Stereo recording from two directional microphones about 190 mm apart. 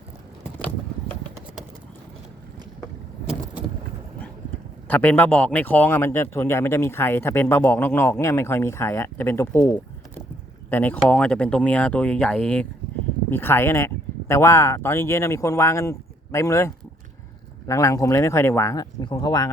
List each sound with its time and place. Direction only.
4.9 s speech: 10° left (ahead or behind)